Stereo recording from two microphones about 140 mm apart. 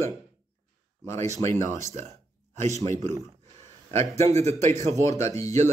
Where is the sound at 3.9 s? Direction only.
50° right (ahead or behind).